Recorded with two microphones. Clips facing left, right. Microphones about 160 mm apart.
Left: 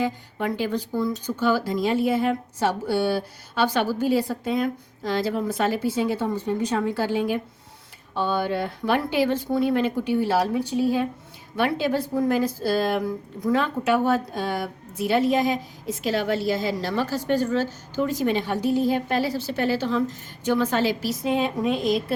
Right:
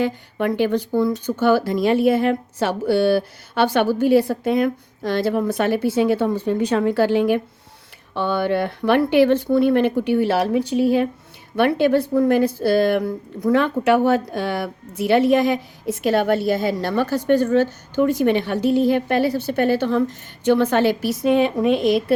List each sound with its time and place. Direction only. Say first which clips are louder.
0.0 s a woman's voice: right 5 dB; 65° right (ahead or behind)